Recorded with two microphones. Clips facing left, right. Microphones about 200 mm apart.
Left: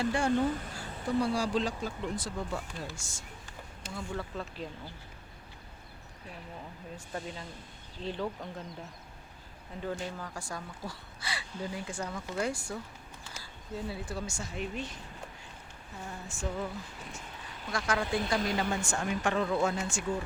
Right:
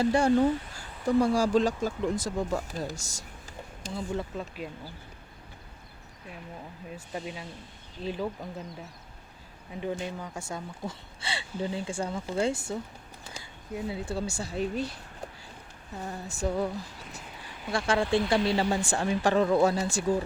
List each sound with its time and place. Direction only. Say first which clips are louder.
0.0 s speech: right 6 dB; 40° right (ahead or behind)
3.8 s speech: right 5 dB; 25° right (ahead or behind)
4.4 s speech: right 3 dB; 10° right (ahead or behind)
7.1 s speech: right 2 dB; 15° right (ahead or behind)
9.8 s speech: right 3 dB; 20° right (ahead or behind); by 14.9 s 35° right (ahead or behind)
16.0 s speech: right 7 dB; 40° right (ahead or behind)
17.7 s speech: right 5 dB; 30° right (ahead or behind)